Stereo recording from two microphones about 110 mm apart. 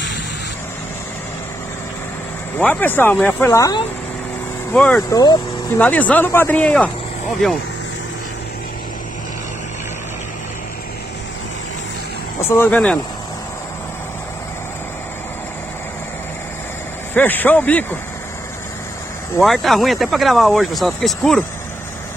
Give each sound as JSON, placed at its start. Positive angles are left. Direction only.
{"t": 2.6, "sound": "speech", "side_deg": 15}
{"t": 4.7, "sound": "speech", "side_deg": 10}
{"t": 5.1, "sound": "speech", "side_deg": 35}
{"t": 5.8, "sound": "speech", "side_deg": 15}
{"t": 12.4, "sound": "speech", "side_deg": 20}
{"t": 17.1, "sound": "speech", "side_deg": 15}
{"t": 19.4, "sound": "speech", "side_deg": 0}